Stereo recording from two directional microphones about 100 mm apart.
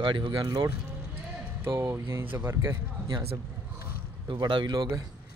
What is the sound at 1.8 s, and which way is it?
Speech, 25° right (ahead or behind).